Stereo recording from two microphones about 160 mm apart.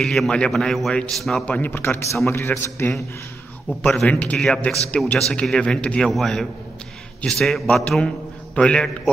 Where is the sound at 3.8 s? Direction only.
5° left (ahead or behind).